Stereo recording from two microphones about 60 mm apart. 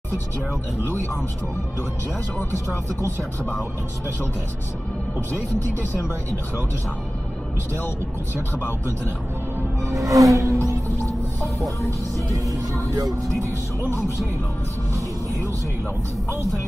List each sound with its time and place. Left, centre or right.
9.9 s speech: right
12.2 s speech: right